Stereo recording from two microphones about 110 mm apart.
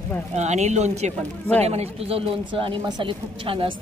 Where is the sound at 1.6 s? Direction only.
65° right (ahead or behind).